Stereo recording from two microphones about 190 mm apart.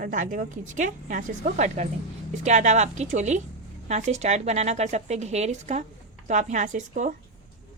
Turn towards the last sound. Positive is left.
turn(degrees=-40)  # may be behind; listen again after turning